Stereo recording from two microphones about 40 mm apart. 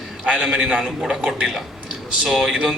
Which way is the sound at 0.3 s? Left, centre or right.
Centre.